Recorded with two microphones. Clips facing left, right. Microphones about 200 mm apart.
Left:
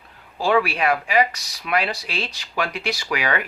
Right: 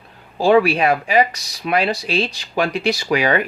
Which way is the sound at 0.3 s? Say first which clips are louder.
Right 6 dB; 25° right (ahead or behind).